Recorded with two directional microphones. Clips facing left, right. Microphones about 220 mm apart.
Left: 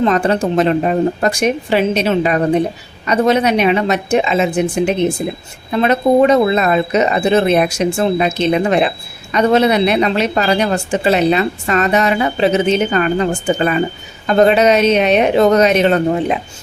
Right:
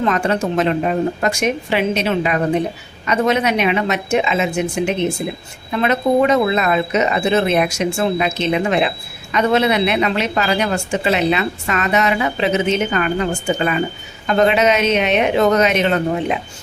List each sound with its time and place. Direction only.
0.0 s a woman's voice: 35° left (ahead or behind)